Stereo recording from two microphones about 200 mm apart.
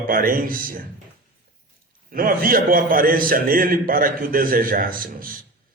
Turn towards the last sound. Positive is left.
turn(degrees=-45)  # may be behind; listen again after turning